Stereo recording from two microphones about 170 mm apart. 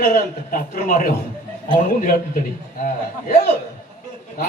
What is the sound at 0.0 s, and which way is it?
A man's voice, 55° left (ahead or behind).